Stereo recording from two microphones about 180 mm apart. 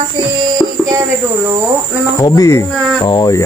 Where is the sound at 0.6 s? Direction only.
20° left (ahead or behind).